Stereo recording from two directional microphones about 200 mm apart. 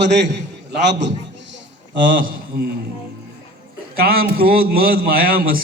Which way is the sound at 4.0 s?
50° right (ahead or behind).